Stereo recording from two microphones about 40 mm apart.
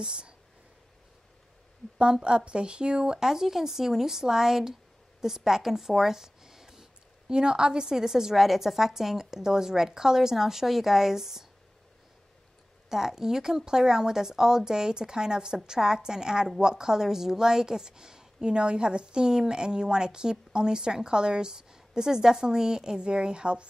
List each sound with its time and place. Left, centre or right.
0.0 s a woman's voice: right
2.2 s a woman's voice: right
3.2 s speech: centre
12.9 s a woman's voice: centre